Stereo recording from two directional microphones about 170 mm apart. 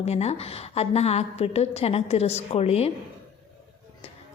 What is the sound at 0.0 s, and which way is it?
A woman's voice, 40° left (ahead or behind).